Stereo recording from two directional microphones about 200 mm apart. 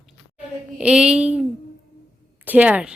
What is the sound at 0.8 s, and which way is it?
Speech, 5° right (ahead or behind).